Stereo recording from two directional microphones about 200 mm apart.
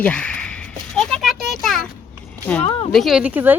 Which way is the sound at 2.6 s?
30° left (ahead or behind).